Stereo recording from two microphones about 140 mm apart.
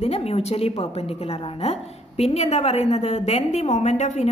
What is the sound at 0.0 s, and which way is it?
A woman's voice, 45° left (ahead or behind).